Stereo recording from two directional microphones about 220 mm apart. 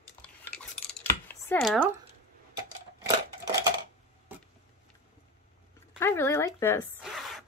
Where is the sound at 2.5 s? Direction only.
15° right (ahead or behind).